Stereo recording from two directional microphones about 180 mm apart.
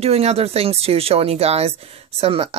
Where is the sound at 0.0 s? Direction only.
35° right (ahead or behind).